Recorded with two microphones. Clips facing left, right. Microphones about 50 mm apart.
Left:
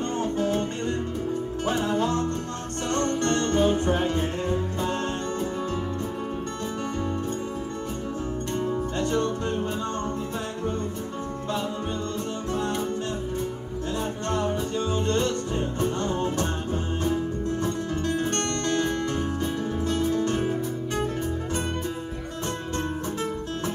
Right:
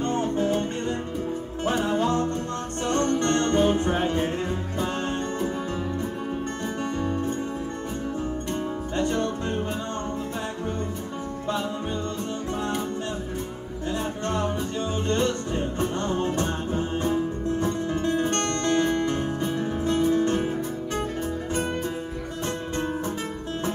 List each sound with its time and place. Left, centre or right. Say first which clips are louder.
1.9 s music: right 1 dB; centre
7.0 s music: right 3 dB; centre
8.6 s music: even; centre
12.5 s music: left 1 dB; centre
15.0 s music: right 3 dB; right
16.7 s music: right 2 dB; centre
20.3 s music: even; centre